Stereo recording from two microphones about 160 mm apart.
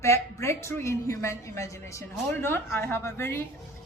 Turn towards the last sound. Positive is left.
turn(degrees=15)  # may be behind; listen again after turning